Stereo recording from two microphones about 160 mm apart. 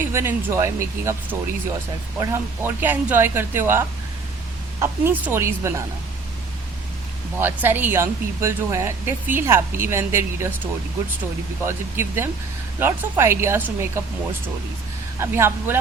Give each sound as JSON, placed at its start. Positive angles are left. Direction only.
{"t": 0.1, "sound": "speech", "side_deg": -15}
{"t": 7.3, "sound": "speech", "side_deg": -10}
{"t": 11.6, "sound": "speech", "side_deg": -15}
{"t": 15.2, "sound": "speech", "side_deg": -15}